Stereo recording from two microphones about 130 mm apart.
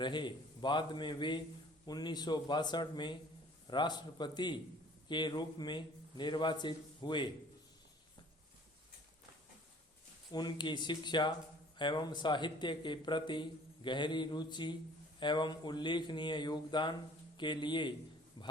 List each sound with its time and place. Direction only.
0.0 s a man's voice: 35° left (ahead or behind)
10.3 s a man's voice: 35° left (ahead or behind)